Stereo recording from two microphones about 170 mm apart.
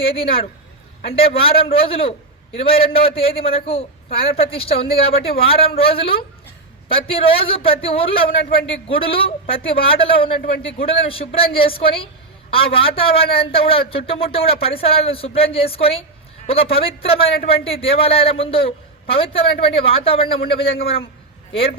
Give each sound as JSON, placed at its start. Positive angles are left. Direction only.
{"t": 0.0, "sound": "a man's voice", "side_deg": 35}
{"t": 10.4, "sound": "a man's voice", "side_deg": 60}
{"t": 10.8, "sound": "a man's voice", "side_deg": 35}